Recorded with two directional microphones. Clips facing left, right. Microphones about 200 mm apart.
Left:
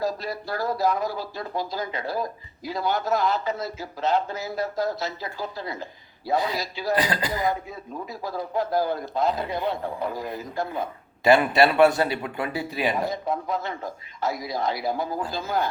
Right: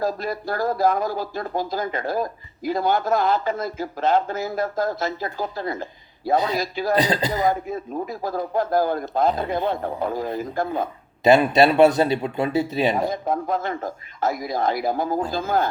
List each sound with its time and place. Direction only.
0.0 s a man's voice: 50° right (ahead or behind)
6.3 s speech: 20° right (ahead or behind)
6.6 s a man's voice: 50° right (ahead or behind)
6.9 s speech: 25° right (ahead or behind)
7.7 s a man's voice: 50° right (ahead or behind)
11.2 s speech: 20° right (ahead or behind)
13.1 s a man's voice: 50° right (ahead or behind)